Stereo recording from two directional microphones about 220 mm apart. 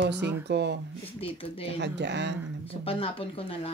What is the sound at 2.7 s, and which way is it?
Speech, 25° left (ahead or behind).